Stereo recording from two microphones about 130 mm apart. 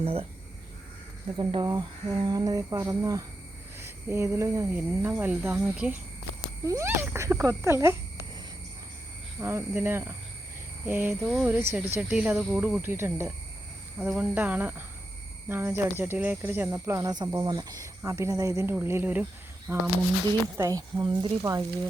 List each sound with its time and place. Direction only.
0.0 s speech: 50° right (ahead or behind)
1.4 s speech: 40° right (ahead or behind); by 7.9 s 20° right (ahead or behind)
9.4 s speech: 20° right (ahead or behind)
20.6 s speech: 30° right (ahead or behind)